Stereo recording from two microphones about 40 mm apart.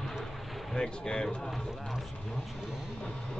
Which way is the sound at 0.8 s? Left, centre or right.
Left.